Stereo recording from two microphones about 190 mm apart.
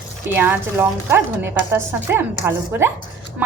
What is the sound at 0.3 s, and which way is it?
Speech, 10° right (ahead or behind).